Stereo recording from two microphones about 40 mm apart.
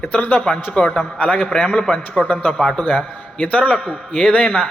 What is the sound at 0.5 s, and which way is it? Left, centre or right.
Speech, left.